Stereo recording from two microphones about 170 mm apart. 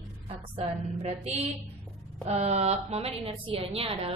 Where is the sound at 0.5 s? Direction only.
40° right (ahead or behind).